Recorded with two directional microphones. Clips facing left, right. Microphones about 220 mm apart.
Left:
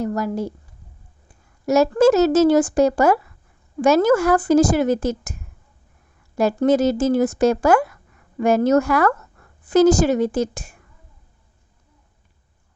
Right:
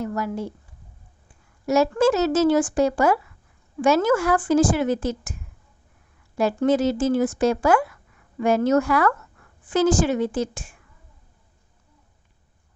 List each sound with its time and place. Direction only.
0.0 s speech: 40° left (ahead or behind)
1.6 s speech: 40° left (ahead or behind)